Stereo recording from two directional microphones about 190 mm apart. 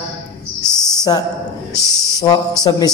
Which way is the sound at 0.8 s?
20° left (ahead or behind).